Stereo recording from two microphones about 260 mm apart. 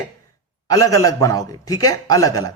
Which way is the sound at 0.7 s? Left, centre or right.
Centre.